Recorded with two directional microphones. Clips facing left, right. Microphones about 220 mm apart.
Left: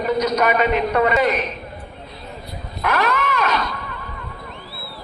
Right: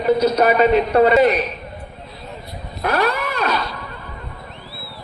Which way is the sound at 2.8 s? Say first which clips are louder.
Right 1 dB; 35° right (ahead or behind).